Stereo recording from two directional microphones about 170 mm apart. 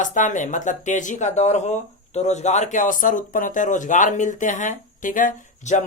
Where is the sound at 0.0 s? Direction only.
50° left (ahead or behind).